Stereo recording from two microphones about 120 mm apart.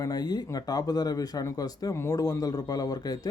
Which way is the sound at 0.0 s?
35° left (ahead or behind).